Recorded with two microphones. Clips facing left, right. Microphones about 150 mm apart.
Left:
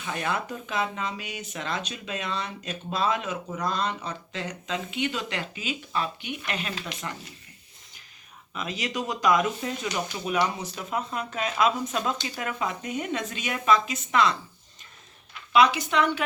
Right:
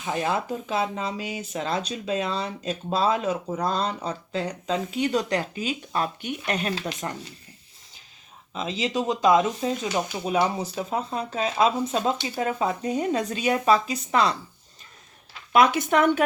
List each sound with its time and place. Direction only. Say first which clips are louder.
0.0 s speech: right 4 dB; 30° right (ahead or behind)
8.5 s speech: right 5 dB; 25° right (ahead or behind)
15.5 s speech: right 2 dB; 50° right (ahead or behind)